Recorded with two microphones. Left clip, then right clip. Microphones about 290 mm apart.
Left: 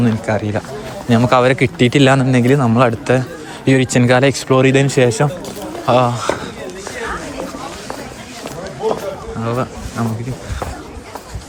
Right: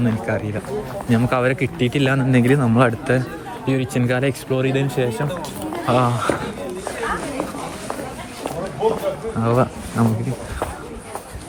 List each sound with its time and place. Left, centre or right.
0.0 s speech: centre
3.7 s speech: centre
5.9 s speech: centre
9.4 s speech: centre